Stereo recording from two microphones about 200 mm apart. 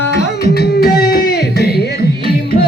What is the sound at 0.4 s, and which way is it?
Music, 55° left (ahead or behind).